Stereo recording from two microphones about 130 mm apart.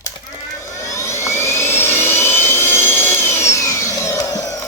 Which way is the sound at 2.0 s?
15° left (ahead or behind).